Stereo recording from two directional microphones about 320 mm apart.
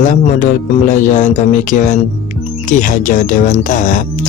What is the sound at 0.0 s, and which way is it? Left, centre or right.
Speech, left.